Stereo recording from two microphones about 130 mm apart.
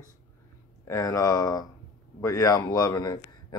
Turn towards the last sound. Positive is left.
turn(degrees=30)  # may be behind; listen again after turning